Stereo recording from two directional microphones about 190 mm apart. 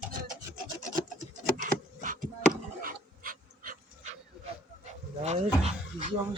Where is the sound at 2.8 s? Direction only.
50° right (ahead or behind).